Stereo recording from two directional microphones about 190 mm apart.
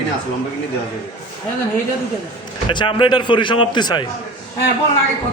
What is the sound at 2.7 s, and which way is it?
A man's voice, 25° left (ahead or behind).